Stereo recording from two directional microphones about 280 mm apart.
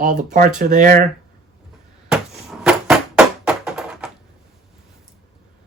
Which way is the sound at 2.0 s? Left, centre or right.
Centre.